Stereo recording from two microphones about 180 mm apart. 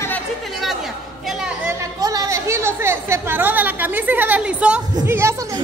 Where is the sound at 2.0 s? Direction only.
20° right (ahead or behind).